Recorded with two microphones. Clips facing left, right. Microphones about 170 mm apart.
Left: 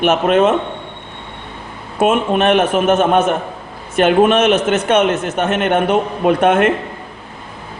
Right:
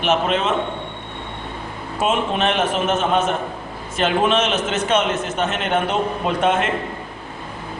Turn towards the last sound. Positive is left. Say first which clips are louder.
# left 7 dB
turn(degrees=60)  # may be behind; listen again after turning